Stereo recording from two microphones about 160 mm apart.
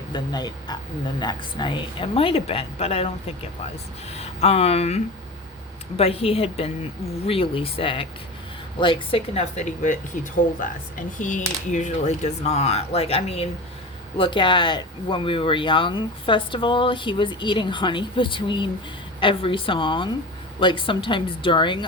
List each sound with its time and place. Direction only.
0.1 s speech: 25° left (ahead or behind)
4.1 s speech: 40° left (ahead or behind)
11.2 s speech: 50° left (ahead or behind); by 21.8 s 30° left (ahead or behind)